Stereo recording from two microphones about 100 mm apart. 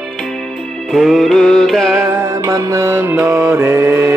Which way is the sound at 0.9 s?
Centre (ahead or behind).